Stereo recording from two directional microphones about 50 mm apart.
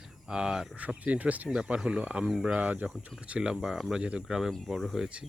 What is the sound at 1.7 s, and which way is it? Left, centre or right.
Speech, right.